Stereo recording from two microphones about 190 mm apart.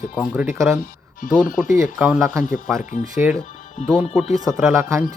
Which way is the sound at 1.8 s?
5° right (ahead or behind).